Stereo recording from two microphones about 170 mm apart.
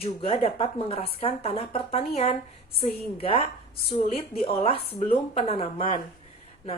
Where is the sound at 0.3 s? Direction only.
35° left (ahead or behind).